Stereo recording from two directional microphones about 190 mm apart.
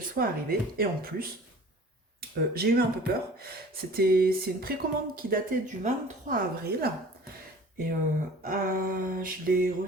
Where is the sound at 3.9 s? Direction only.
50° right (ahead or behind).